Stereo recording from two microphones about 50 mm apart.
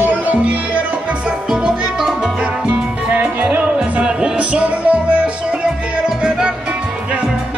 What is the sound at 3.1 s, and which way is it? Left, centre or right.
Music, right.